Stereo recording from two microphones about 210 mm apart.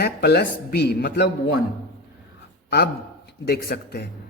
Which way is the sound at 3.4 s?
50° left (ahead or behind).